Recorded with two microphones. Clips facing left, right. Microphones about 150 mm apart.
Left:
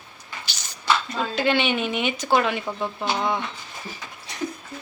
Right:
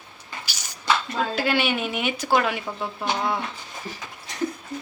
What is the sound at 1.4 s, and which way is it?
Speech, 5° right (ahead or behind).